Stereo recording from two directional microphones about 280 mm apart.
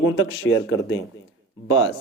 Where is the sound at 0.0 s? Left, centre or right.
Left.